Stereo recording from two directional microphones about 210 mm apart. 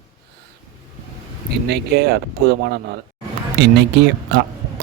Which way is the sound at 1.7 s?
50° right (ahead or behind).